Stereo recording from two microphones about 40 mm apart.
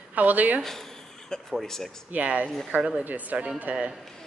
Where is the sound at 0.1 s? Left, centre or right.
Right.